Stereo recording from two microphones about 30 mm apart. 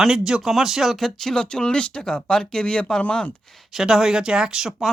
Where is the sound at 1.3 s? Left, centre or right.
Left.